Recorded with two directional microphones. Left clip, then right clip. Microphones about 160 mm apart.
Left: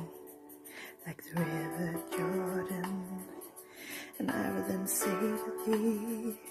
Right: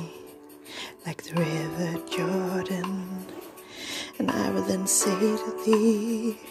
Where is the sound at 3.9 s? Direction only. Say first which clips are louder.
Right 8 dB; 20° right (ahead or behind).